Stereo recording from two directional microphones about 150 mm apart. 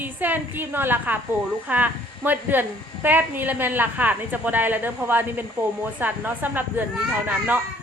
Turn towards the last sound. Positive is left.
turn(degrees=-10)  # may be behind; listen again after turning